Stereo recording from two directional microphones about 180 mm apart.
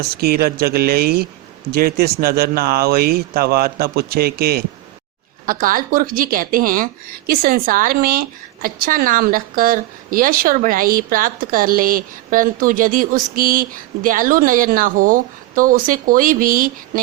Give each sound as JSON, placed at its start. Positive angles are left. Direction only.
{"t": 0.0, "sound": "a woman's voice", "side_deg": -60}